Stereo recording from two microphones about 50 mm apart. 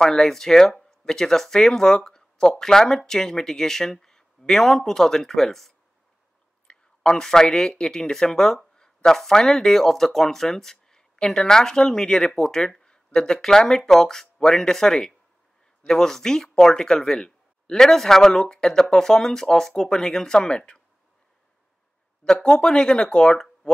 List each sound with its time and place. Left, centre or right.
0.0 s a man's voice: centre
6.7 s a man's voice: centre
22.2 s a man's voice: centre